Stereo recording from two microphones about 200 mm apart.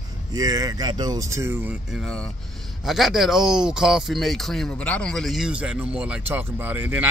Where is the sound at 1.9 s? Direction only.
Centre (ahead or behind).